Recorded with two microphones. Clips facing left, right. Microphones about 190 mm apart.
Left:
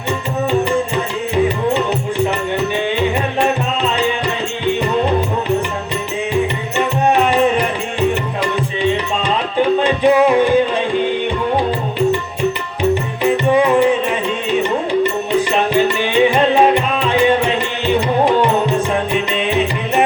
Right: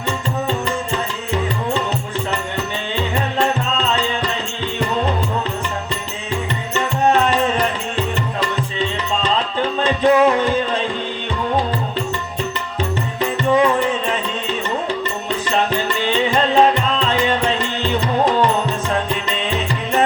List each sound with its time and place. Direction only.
3.3 s music: 15° left (ahead or behind)
6.7 s music: 15° left (ahead or behind)
12.9 s music: 15° left (ahead or behind)
15.4 s music: 15° left (ahead or behind)
19.1 s music: 15° left (ahead or behind)